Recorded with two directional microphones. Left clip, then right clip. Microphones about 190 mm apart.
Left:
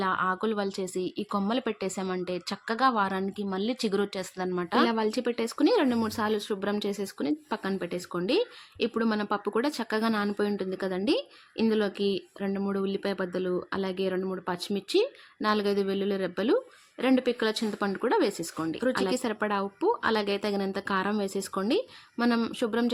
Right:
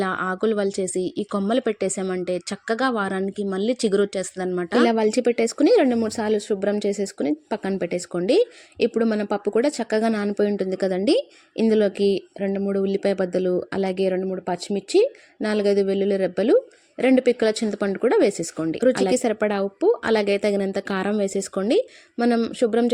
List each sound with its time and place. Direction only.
0.0 s a woman's voice: 20° right (ahead or behind)